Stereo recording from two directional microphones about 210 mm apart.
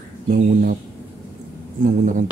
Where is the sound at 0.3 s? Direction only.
40° right (ahead or behind).